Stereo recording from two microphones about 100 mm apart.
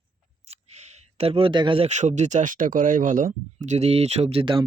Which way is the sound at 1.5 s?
50° right (ahead or behind).